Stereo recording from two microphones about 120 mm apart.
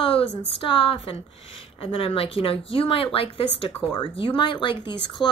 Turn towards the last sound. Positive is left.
turn(degrees=45)  # may be behind; listen again after turning